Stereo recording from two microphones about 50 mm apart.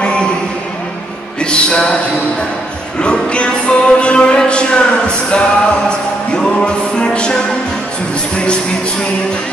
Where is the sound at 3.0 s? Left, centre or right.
Left.